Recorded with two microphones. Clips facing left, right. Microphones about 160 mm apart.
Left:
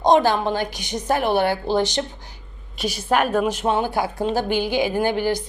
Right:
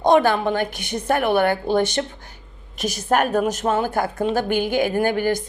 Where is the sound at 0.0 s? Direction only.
55° right (ahead or behind).